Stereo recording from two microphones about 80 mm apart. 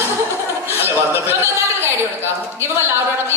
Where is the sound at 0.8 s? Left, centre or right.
Right.